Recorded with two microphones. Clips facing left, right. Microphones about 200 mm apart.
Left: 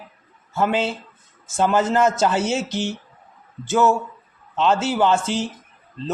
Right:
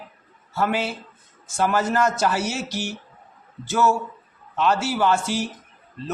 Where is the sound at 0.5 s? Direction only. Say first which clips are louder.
Left 3 dB; 20° left (ahead or behind).